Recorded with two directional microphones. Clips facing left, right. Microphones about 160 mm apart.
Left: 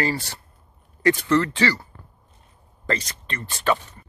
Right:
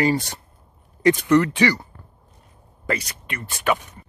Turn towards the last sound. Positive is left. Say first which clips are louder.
# even
turn(degrees=-15)  # may be behind; listen again after turning